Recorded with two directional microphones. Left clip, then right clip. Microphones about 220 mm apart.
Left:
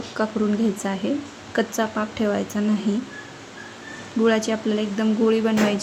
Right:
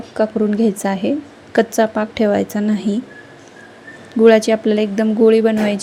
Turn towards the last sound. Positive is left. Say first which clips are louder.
# right 6 dB
turn(degrees=-20)  # may be behind; listen again after turning